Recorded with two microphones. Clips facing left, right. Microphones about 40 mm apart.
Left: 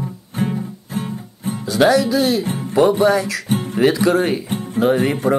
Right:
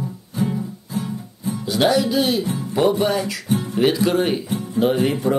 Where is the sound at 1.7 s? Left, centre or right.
Left.